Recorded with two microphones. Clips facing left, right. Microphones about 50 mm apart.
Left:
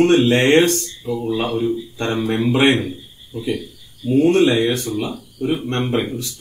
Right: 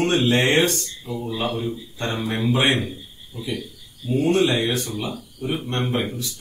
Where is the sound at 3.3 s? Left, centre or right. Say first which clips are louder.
Left 6 dB; left.